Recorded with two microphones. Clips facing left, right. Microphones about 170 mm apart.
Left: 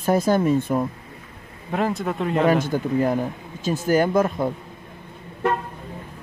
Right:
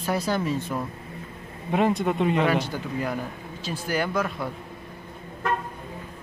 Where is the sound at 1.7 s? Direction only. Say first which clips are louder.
Right 1 dB; centre (ahead or behind).